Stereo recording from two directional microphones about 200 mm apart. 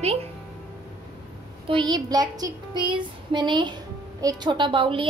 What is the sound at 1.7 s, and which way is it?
A woman's voice, 20° right (ahead or behind).